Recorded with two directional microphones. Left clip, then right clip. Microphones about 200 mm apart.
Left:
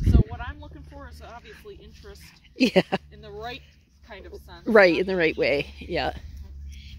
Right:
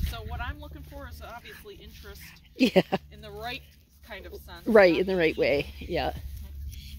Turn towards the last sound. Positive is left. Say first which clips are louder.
# left 2 dB
turn(degrees=5)  # may be behind; listen again after turning